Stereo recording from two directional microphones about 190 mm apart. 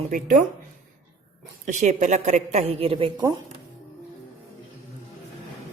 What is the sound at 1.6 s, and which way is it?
Speech, 40° right (ahead or behind).